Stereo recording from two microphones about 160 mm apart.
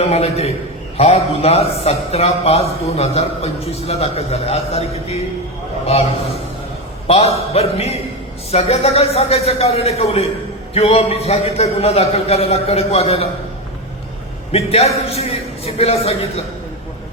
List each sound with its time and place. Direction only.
0.0 s a man's voice: 40° left (ahead or behind)
14.5 s a man's voice: 40° left (ahead or behind)